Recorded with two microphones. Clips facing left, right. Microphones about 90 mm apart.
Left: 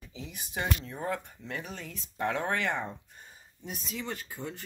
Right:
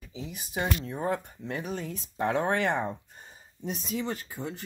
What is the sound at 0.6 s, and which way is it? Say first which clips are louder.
Speech: right 3 dB; 20° right (ahead or behind).